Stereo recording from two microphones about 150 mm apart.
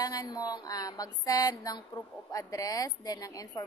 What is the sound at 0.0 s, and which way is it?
A woman's voice, 25° left (ahead or behind).